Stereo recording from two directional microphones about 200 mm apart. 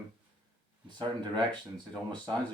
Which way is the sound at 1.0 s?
20° right (ahead or behind).